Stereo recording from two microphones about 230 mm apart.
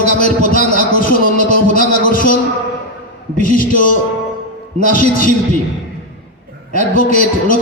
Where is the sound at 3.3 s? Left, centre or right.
Left.